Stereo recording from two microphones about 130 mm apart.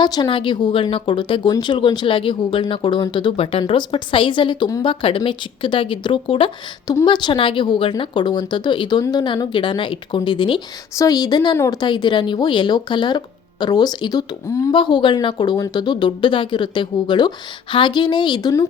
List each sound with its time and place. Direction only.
0.0 s a woman's voice: 35° left (ahead or behind)
11.8 s speech: 35° left (ahead or behind)